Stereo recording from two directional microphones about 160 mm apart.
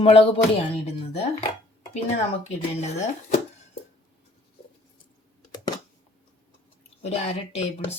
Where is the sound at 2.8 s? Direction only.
45° left (ahead or behind).